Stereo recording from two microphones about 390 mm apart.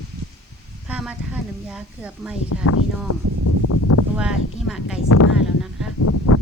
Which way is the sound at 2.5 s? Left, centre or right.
Left.